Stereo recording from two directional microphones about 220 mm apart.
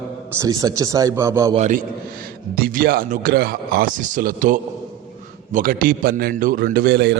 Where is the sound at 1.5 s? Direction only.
35° right (ahead or behind).